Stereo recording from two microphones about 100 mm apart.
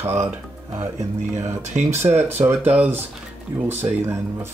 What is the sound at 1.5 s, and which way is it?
Speech, 25° right (ahead or behind).